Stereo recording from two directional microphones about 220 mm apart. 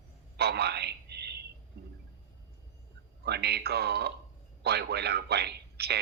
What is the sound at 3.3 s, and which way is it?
A man's voice, 50° right (ahead or behind).